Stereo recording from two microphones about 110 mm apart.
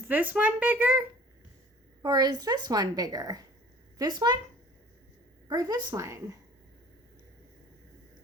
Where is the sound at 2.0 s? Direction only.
40° right (ahead or behind).